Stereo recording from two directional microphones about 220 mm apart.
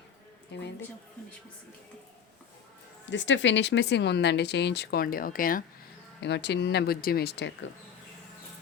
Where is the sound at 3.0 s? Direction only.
55° left (ahead or behind); by 5.6 s 40° left (ahead or behind).